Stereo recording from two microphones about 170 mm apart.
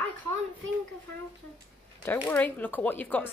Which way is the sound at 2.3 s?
10° left (ahead or behind).